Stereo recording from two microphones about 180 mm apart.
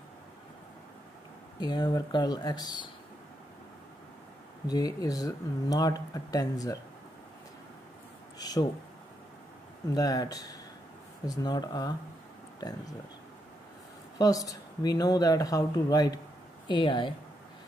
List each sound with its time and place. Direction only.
1.6 s speech: 25° left (ahead or behind)
4.6 s speech: 20° left (ahead or behind)
8.4 s speech: 20° left (ahead or behind)
9.8 s speech: 20° left (ahead or behind)
14.1 s speech: 20° left (ahead or behind)